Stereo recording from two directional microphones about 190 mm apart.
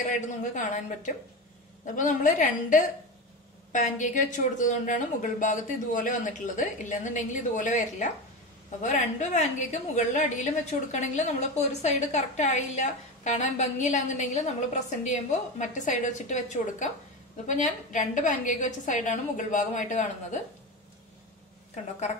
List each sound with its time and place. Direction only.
0.1 s a woman's voice: 40° left (ahead or behind)